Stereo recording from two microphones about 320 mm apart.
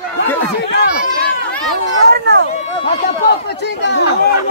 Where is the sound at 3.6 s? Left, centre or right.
Left.